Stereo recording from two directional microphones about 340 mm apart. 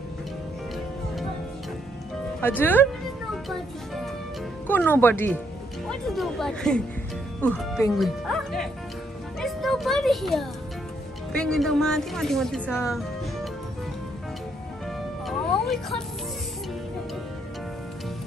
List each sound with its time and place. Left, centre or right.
2.4 s speech: centre
3.4 s music: centre
4.6 s speech: centre
9.4 s music: centre
11.3 s speech: centre
15.2 s music: centre